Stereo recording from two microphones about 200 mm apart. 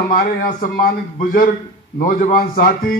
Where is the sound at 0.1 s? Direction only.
45° left (ahead or behind).